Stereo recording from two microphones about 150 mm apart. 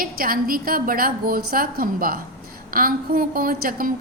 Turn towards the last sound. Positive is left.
turn(degrees=-70)  # may be behind; listen again after turning